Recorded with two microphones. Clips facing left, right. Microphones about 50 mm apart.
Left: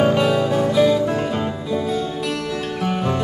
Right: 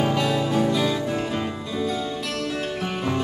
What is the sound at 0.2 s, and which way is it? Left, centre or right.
Music, centre.